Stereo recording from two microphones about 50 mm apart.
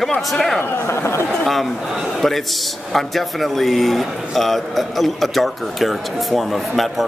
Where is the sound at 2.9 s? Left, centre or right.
Centre.